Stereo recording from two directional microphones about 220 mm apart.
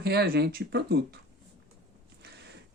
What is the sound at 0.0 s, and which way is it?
Speech, 45° right (ahead or behind).